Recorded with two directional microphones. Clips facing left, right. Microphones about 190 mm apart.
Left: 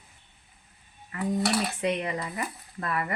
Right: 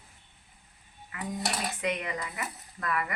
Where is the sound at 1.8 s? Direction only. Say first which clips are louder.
Left 4 dB; 30° left (ahead or behind).